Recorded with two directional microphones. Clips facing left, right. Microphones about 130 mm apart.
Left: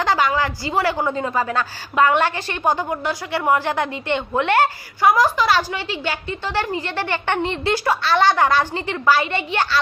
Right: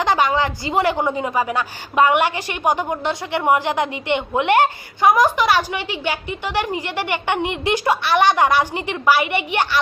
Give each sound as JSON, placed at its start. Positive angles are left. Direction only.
{"t": 0.0, "sound": "a woman's voice", "side_deg": -20}